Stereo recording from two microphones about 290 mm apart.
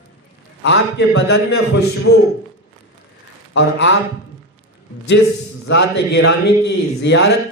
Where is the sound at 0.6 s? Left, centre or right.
Left.